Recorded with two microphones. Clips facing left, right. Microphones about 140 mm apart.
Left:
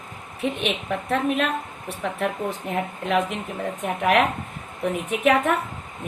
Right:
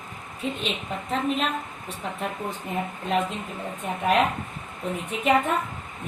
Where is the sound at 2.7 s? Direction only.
80° left.